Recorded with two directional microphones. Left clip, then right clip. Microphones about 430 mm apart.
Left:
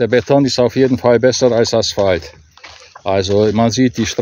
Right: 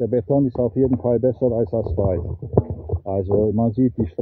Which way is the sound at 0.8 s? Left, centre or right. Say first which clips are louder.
Left 7 dB; centre.